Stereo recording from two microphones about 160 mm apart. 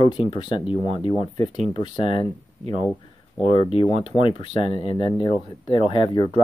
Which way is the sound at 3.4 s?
50° right (ahead or behind).